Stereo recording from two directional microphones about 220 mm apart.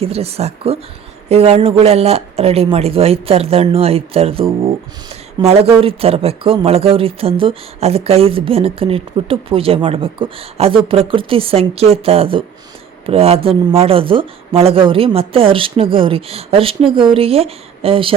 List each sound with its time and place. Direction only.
0.0 s speech: 25° right (ahead or behind)